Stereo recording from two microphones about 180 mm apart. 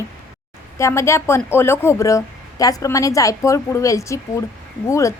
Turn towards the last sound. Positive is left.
turn(degrees=15)  # may be behind; listen again after turning